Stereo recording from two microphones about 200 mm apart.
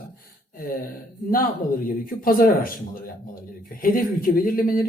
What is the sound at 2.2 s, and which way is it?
Speech, 45° left (ahead or behind).